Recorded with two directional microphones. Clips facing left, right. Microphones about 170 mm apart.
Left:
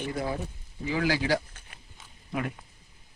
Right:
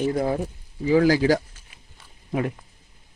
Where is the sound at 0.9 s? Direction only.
40° right (ahead or behind).